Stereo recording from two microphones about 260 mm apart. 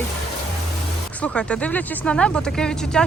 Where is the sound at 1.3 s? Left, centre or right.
Centre.